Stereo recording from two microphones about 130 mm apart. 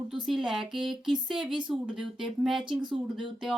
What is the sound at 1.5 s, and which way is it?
Speech, 40° right (ahead or behind).